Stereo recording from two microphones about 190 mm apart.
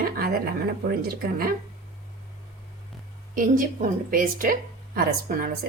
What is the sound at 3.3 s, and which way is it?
A woman's voice, 45° right (ahead or behind).